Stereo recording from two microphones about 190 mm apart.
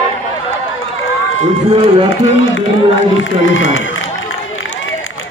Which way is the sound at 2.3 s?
90° left.